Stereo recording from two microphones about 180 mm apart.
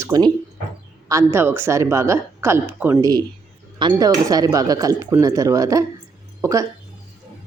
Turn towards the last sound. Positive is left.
turn(degrees=-20)  # may be behind; listen again after turning